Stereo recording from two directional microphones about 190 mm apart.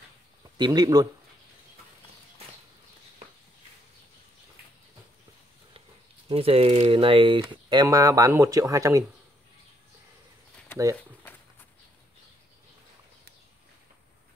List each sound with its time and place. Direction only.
0.4 s speech: 20° right (ahead or behind)
6.2 s speech: 30° right (ahead or behind)